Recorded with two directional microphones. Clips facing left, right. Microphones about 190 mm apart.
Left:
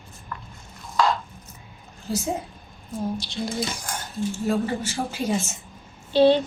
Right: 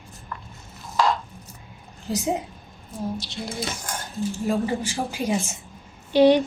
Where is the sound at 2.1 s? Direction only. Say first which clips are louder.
Even; 15° right (ahead or behind).